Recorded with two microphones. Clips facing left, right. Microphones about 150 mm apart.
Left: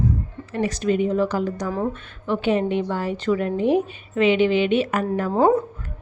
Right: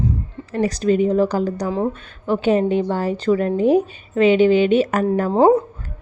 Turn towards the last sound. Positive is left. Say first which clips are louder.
# right 4 dB
turn(degrees=-40)  # may be behind; listen again after turning